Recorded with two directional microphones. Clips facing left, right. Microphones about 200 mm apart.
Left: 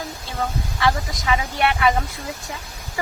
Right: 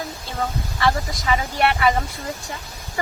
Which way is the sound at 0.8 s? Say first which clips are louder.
Even; centre (ahead or behind).